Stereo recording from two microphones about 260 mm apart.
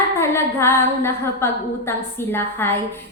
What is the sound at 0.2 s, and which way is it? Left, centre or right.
A woman's voice, centre.